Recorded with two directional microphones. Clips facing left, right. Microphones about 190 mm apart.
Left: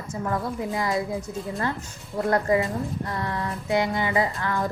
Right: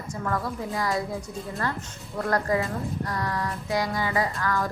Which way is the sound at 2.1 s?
25° left (ahead or behind).